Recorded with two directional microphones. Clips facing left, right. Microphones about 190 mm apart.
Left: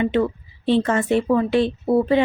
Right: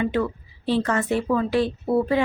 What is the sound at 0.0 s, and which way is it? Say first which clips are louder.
A woman's voice: left 4 dB; 20° left (ahead or behind).